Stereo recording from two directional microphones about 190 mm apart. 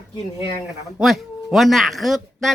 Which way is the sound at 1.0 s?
Centre (ahead or behind).